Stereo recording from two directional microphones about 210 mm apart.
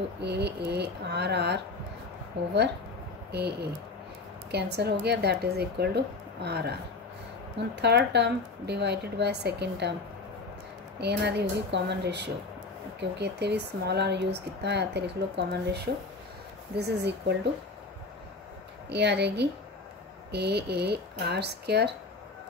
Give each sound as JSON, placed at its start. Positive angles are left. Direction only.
{"t": 0.2, "sound": "speech", "side_deg": -50}
{"t": 3.3, "sound": "speech", "side_deg": -50}
{"t": 7.8, "sound": "speech", "side_deg": -55}
{"t": 11.0, "sound": "speech", "side_deg": -50}
{"t": 18.9, "sound": "speech", "side_deg": -55}